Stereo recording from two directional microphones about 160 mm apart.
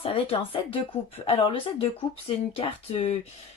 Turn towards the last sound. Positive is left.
turn(degrees=40)  # may be behind; listen again after turning